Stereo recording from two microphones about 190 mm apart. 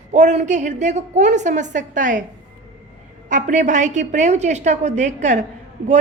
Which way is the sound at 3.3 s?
40° right (ahead or behind).